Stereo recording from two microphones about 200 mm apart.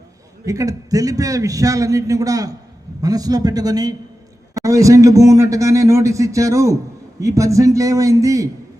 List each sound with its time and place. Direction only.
0.4 s a man's voice: 15° right (ahead or behind)